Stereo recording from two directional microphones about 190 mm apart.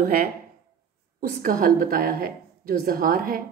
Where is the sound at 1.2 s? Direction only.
45° right (ahead or behind).